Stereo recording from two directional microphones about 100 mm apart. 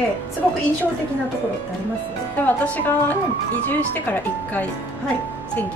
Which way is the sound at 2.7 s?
20° left (ahead or behind).